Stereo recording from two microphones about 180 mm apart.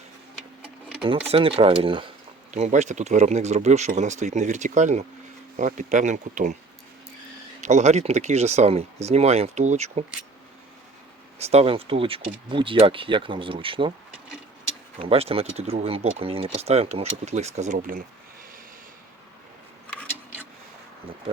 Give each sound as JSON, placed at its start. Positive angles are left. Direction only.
{"t": 1.3, "sound": "speech", "side_deg": -30}
{"t": 2.5, "sound": "speech", "side_deg": -40}
{"t": 7.6, "sound": "speech", "side_deg": -40}
{"t": 11.3, "sound": "speech", "side_deg": -35}
{"t": 14.9, "sound": "speech", "side_deg": -30}